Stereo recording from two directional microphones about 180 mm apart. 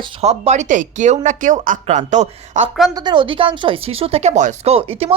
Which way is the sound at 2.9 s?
25° right (ahead or behind).